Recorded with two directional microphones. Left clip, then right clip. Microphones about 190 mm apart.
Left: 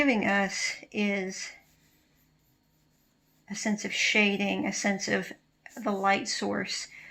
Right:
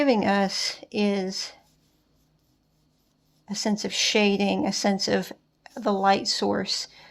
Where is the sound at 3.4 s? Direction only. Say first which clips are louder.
Right 4 dB; 60° right (ahead or behind).